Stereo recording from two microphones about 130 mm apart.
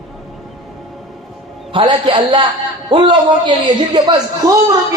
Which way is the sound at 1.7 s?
40° right (ahead or behind).